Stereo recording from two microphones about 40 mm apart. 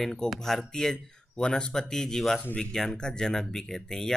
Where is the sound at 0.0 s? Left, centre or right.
Centre.